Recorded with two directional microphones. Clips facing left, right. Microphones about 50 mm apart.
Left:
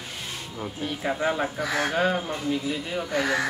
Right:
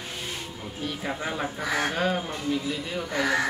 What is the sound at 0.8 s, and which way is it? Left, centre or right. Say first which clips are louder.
Speech: left 4 dB; centre.